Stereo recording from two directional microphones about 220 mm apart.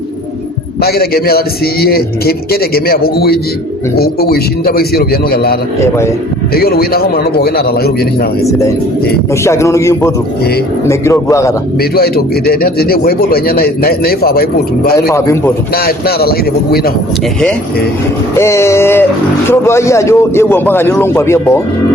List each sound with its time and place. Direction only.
0.8 s speech: 45° left (ahead or behind)
9.3 s a man's voice: 10° left (ahead or behind)
11.8 s speech: 45° left (ahead or behind)
15.1 s a man's voice: 10° left (ahead or behind)
15.7 s speech: 45° left (ahead or behind)
18.3 s a man's voice: 10° left (ahead or behind)